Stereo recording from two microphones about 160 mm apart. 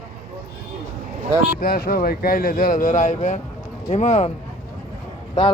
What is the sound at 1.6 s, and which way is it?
Speech, 65° left (ahead or behind).